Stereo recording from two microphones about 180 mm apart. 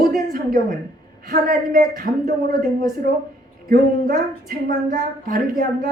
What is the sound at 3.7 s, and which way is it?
Speech, 55° right (ahead or behind).